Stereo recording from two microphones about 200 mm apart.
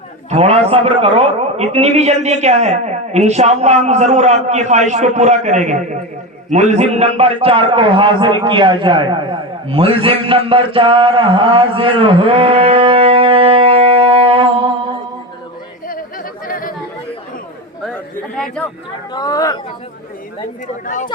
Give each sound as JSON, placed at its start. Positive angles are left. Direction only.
{"t": 0.3, "sound": "a man's voice", "side_deg": -30}
{"t": 15.9, "sound": "chatter", "side_deg": 45}
{"t": 17.8, "sound": "a sound", "side_deg": 5}
{"t": 19.1, "sound": "speech", "side_deg": 20}
{"t": 20.8, "sound": "speech", "side_deg": 40}